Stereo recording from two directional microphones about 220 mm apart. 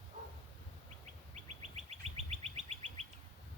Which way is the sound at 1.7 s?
30° right (ahead or behind).